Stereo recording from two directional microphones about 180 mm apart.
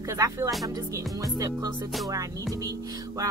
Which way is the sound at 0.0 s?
15° right (ahead or behind).